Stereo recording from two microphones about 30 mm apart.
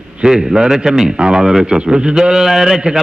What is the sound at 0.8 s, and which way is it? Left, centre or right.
Speech, centre.